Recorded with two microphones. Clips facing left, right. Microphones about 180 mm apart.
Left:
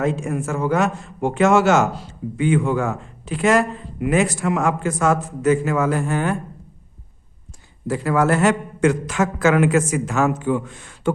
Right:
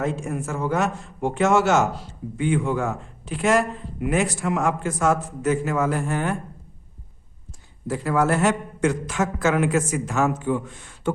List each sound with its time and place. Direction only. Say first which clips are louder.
0.0 s a man's voice: left 4 dB; 90° left
7.9 s a man's voice: left 3 dB; 90° left